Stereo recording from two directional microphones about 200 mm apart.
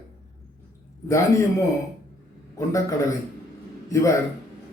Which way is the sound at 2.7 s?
15° left (ahead or behind).